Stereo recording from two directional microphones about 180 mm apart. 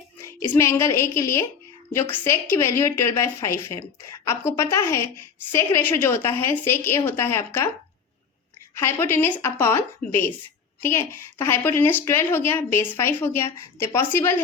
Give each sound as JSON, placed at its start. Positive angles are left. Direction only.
{"t": 0.2, "sound": "a woman's voice", "side_deg": 15}
{"t": 8.7, "sound": "a woman's voice", "side_deg": 15}